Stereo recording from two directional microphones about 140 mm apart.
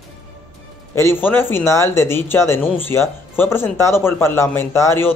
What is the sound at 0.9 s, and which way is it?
Speech, 15° left (ahead or behind).